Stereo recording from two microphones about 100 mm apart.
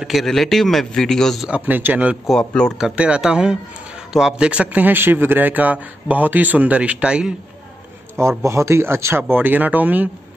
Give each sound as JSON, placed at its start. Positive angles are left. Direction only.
{"t": 0.0, "sound": "a man's voice", "side_deg": 0}
{"t": 1.5, "sound": "a man's voice", "side_deg": -20}
{"t": 2.2, "sound": "speech", "side_deg": 5}
{"t": 2.8, "sound": "a man's voice", "side_deg": -10}
{"t": 8.2, "sound": "speech", "side_deg": -30}